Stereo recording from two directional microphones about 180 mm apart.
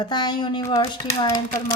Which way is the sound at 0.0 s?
25° left (ahead or behind).